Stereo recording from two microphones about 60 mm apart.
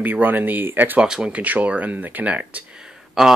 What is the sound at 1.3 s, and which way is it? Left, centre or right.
Speech, right.